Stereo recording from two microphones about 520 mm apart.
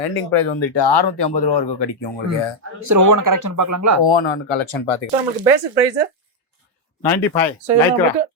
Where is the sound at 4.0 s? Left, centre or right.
Left.